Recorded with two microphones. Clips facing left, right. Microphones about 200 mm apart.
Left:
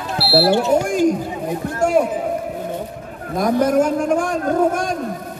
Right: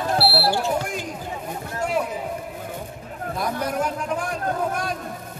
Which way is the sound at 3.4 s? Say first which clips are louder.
Left 10 dB; 45° left (ahead or behind).